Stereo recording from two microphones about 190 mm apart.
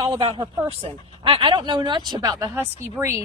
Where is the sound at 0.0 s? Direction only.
25° right (ahead or behind).